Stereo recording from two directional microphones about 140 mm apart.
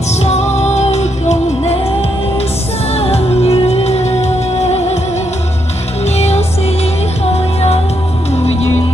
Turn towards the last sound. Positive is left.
turn(degrees=45)  # may be behind; listen again after turning